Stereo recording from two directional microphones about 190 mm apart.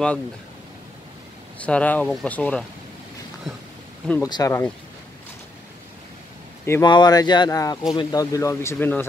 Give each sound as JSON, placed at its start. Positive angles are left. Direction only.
{"t": 1.6, "sound": "speech", "side_deg": 5}
{"t": 4.1, "sound": "speech", "side_deg": 20}
{"t": 6.6, "sound": "speech", "side_deg": 15}